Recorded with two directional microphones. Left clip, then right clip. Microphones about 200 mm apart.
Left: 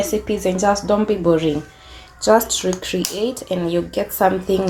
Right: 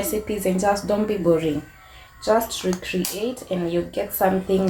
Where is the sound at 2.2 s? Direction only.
50° left (ahead or behind).